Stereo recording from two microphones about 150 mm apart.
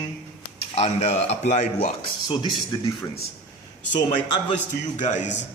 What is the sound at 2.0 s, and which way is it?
Speech, 35° left (ahead or behind).